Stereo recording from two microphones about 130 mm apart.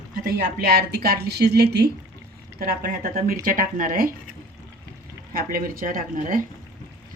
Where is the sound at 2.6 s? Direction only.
90° right.